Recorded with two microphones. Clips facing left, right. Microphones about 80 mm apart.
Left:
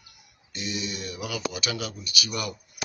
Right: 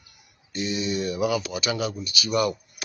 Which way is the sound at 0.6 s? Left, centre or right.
Right.